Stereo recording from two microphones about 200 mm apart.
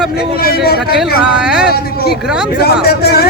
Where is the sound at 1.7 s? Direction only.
50° left (ahead or behind).